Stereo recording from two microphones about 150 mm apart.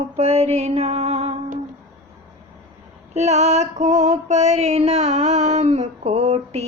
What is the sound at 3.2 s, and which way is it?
Music, 50° right (ahead or behind).